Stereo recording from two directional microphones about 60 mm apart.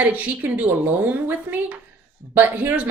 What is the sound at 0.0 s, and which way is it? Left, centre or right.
Speech, right.